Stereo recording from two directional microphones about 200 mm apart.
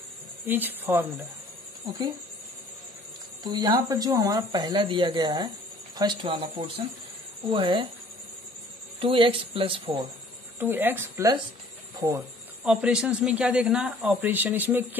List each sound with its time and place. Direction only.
0.5 s speech: 10° right (ahead or behind)
1.9 s speech: 20° right (ahead or behind)
3.4 s speech: 20° right (ahead or behind)
9.0 s speech: 25° right (ahead or behind)
10.6 s speech: 10° right (ahead or behind)
12.0 s speech: 25° right (ahead or behind)
12.6 s speech: 5° right (ahead or behind)